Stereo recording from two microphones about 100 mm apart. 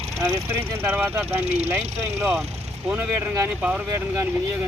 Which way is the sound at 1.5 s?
90° right.